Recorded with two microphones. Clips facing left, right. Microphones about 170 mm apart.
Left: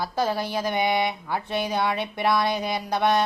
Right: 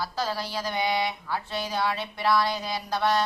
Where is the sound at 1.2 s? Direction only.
20° left (ahead or behind).